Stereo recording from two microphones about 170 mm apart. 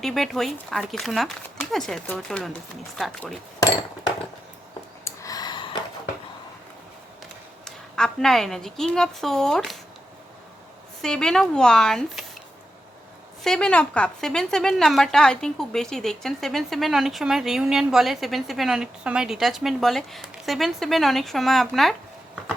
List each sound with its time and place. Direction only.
0.0 s a woman's voice: centre (ahead or behind)
5.0 s a sound: 20° left (ahead or behind)
7.6 s a woman's voice: 5° left (ahead or behind)
11.0 s a woman's voice: 5° left (ahead or behind)
13.4 s a woman's voice: 5° left (ahead or behind)